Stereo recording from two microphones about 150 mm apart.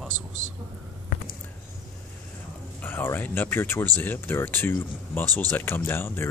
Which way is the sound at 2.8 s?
15° left (ahead or behind).